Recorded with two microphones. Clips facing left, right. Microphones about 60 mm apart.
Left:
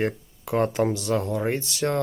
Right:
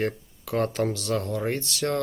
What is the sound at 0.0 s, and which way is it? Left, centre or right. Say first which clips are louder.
Speech: left 2 dB; centre.